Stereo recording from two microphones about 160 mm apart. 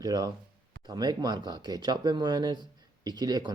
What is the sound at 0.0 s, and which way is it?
Speech, 25° right (ahead or behind).